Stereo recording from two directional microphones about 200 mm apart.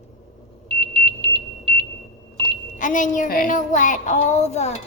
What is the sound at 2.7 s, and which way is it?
A woman's voice, 40° left (ahead or behind).